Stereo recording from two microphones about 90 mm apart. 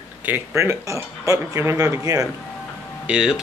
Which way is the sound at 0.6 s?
30° right (ahead or behind).